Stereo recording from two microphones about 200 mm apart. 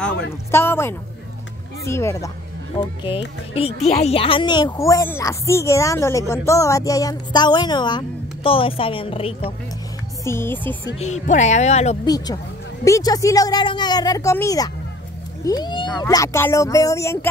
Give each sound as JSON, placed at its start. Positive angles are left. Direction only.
{"t": 0.5, "sound": "speech", "side_deg": 10}
{"t": 2.7, "sound": "a woman's voice", "side_deg": 25}
{"t": 10.2, "sound": "speech", "side_deg": 10}
{"t": 11.0, "sound": "speech", "side_deg": 35}
{"t": 12.0, "sound": "a woman's voice", "side_deg": 20}